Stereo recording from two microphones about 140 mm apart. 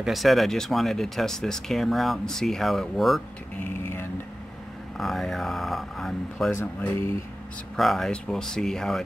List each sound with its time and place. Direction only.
0.0 s speech: centre (ahead or behind)
3.5 s vehicle: 15° left (ahead or behind)
4.9 s speech: centre (ahead or behind)
6.5 s speech: 15° left (ahead or behind)
7.7 s speech: centre (ahead or behind)